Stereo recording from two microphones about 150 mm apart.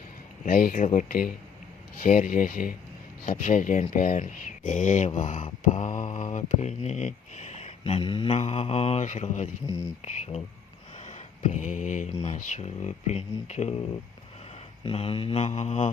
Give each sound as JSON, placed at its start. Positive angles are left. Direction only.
{"t": 0.4, "sound": "speech", "side_deg": 70}
{"t": 10.9, "sound": "a sound", "side_deg": 50}
{"t": 12.2, "sound": "speech", "side_deg": 50}
{"t": 14.8, "sound": "speech", "side_deg": 40}